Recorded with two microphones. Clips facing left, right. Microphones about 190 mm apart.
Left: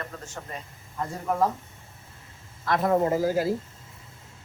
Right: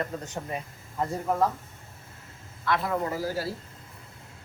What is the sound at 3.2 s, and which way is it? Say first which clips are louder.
Speech: left 6 dB; 20° left (ahead or behind).